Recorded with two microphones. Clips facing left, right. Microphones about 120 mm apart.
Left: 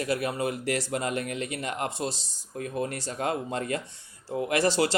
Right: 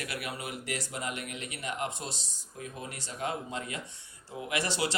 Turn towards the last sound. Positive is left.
turn(degrees=40)  # may be behind; listen again after turning